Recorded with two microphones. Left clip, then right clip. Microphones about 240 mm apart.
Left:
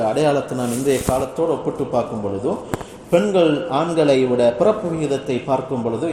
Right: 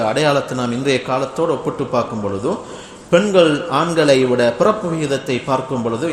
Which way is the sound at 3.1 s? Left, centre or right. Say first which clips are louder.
Right 3 dB; right.